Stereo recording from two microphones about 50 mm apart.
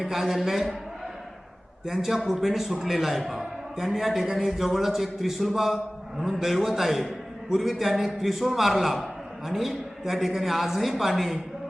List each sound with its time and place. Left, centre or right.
0.0 s a man's voice: centre
1.9 s a man's voice: centre